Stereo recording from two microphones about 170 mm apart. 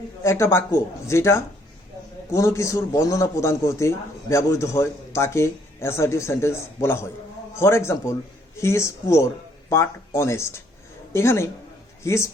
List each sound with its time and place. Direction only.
0.2 s a man's voice: 15° left (ahead or behind)